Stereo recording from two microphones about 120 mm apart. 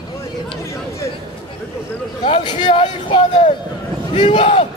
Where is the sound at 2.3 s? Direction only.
40° left (ahead or behind).